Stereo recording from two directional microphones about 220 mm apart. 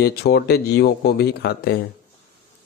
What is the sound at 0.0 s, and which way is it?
Speech, 45° left (ahead or behind).